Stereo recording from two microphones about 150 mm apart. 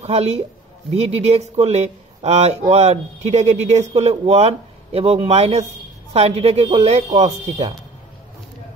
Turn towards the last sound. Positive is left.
turn(degrees=-45)  # may be behind; listen again after turning